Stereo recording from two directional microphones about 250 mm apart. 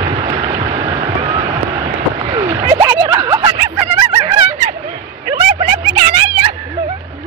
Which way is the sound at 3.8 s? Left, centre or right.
Right.